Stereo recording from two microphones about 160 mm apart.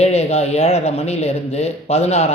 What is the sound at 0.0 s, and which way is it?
A man's voice, 40° left (ahead or behind).